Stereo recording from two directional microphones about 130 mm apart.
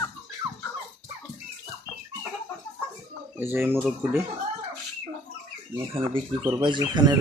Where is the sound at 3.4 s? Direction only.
15° right (ahead or behind).